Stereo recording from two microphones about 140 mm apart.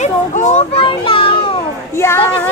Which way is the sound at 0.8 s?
40° left (ahead or behind).